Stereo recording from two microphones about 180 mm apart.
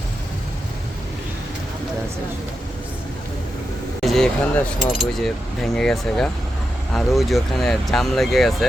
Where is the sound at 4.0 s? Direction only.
Centre (ahead or behind).